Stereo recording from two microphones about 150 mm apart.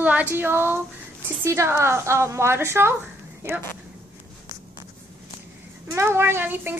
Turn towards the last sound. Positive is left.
turn(degrees=-15)  # may be behind; listen again after turning